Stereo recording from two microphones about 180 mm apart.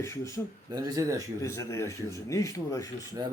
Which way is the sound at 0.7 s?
20° right (ahead or behind).